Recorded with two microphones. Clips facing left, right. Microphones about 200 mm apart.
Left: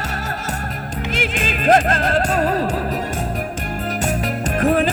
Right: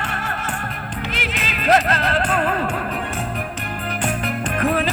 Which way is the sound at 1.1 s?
50° left (ahead or behind).